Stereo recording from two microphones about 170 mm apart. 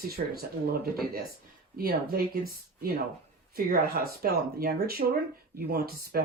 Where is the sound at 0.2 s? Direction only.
55° right (ahead or behind).